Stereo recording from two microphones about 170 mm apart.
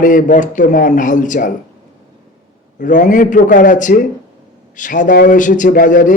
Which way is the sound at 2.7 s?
50° left (ahead or behind).